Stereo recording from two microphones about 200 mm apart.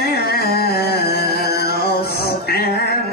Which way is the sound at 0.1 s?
50° left (ahead or behind).